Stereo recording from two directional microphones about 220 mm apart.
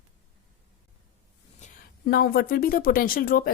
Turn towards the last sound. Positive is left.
turn(degrees=40)  # may be behind; listen again after turning